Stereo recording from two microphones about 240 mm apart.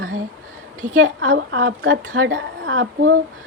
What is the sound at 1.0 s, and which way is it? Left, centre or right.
A woman's voice, right.